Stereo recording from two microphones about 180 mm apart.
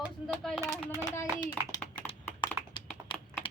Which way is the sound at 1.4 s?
25° left (ahead or behind).